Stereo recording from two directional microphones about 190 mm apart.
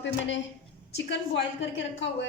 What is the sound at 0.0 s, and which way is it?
Speech, 75° left (ahead or behind).